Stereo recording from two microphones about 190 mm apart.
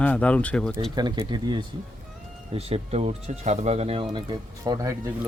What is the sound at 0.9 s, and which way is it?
Speech, 20° right (ahead or behind).